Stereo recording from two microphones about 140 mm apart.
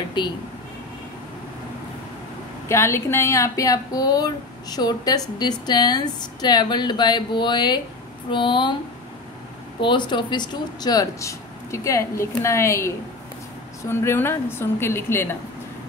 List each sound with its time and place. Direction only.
0.2 s speech: 35° left (ahead or behind)
2.7 s speech: 20° left (ahead or behind); by 8.7 s 35° left (ahead or behind)
9.8 s speech: 35° left (ahead or behind); by 15.2 s 15° left (ahead or behind)